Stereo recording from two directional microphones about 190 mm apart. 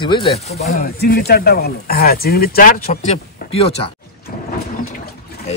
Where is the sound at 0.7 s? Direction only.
50° left (ahead or behind).